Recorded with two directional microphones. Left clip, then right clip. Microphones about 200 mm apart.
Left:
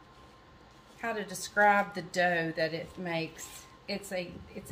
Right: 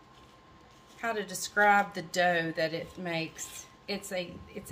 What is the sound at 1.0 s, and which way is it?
A woman's voice, 25° right (ahead or behind).